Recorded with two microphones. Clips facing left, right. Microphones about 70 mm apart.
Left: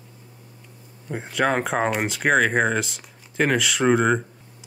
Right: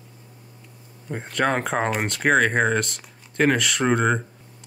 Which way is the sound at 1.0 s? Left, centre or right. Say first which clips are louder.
Left 1 dB; centre.